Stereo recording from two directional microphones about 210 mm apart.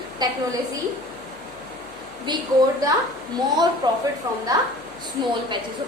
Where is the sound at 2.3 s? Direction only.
20° right (ahead or behind).